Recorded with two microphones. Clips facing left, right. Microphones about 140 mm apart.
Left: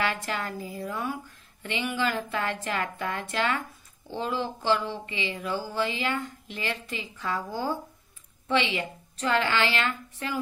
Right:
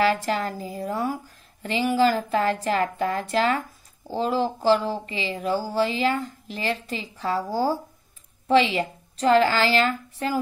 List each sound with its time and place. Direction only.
0.0 s speech: 40° right (ahead or behind)